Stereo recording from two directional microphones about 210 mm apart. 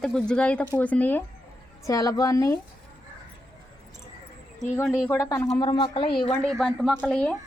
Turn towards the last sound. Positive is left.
turn(degrees=5)  # may be behind; listen again after turning